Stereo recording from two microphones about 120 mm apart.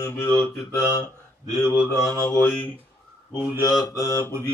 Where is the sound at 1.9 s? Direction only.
25° left (ahead or behind).